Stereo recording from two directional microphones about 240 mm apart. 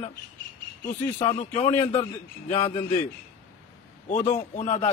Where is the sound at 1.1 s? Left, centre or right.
Left.